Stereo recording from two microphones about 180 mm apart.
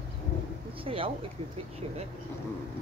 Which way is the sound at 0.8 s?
30° right (ahead or behind).